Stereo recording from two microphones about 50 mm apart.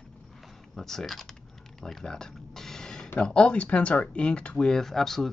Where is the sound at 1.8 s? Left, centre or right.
Centre.